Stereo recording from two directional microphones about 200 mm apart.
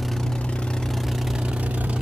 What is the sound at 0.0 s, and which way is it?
Vehicle, centre (ahead or behind).